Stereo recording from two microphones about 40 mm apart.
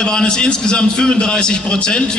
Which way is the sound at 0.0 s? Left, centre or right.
Centre.